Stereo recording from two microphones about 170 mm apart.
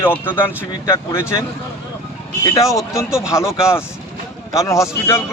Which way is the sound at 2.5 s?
20° left (ahead or behind).